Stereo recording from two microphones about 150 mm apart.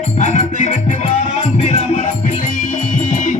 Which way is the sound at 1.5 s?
45° left (ahead or behind).